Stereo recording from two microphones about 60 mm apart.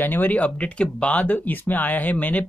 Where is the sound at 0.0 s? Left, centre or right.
Left.